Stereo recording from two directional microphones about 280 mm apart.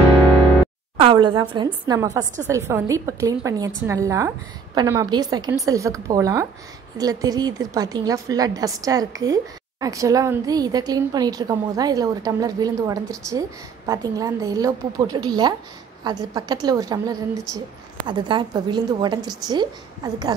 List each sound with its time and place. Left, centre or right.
1.0 s a woman's voice: centre